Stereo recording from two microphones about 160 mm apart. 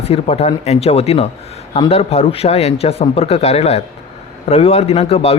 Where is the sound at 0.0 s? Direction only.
40° left (ahead or behind).